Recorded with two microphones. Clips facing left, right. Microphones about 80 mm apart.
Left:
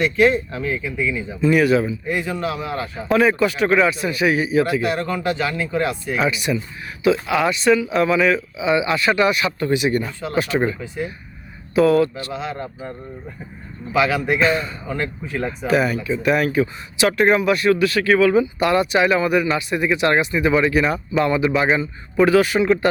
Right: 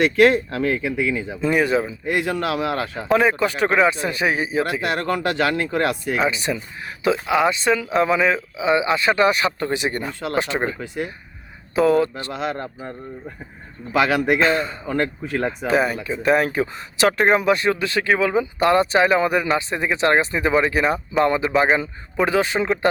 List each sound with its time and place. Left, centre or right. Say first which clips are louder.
0.0 s speech: right 1 dB; right
1.5 s speech: left 3 dB; right
2.0 s speech: right 1 dB; right
3.2 s speech: left 3 dB; right
4.8 s speech: even; right
6.2 s speech: left 1 dB; right
10.8 s speech: even; right
11.9 s speech: left 1 dB; right
12.3 s speech: right 1 dB; right
13.9 s speech: right 1 dB; right
14.4 s speech: even; right
14.8 s speech: right 3 dB; right
15.6 s speech: left 3 dB; right
22.3 s speech: left 4 dB; right